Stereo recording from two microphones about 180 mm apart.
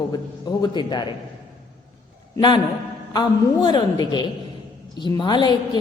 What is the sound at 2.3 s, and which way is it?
A woman's voice, 25° left (ahead or behind).